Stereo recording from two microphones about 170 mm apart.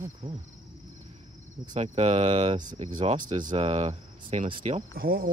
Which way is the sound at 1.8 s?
40° right (ahead or behind).